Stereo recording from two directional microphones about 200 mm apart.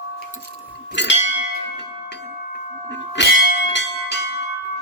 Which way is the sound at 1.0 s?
60° left (ahead or behind).